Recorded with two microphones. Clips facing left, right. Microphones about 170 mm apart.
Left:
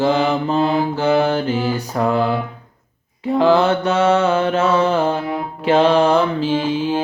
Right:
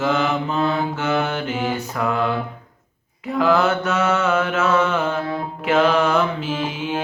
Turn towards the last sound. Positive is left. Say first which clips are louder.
# left 6 dB
turn(degrees=30)  # may be behind; listen again after turning